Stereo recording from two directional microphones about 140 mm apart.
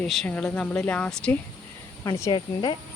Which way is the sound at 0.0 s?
Centre (ahead or behind).